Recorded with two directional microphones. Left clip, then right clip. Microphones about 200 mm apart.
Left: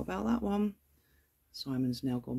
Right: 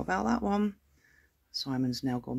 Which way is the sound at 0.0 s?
Centre (ahead or behind).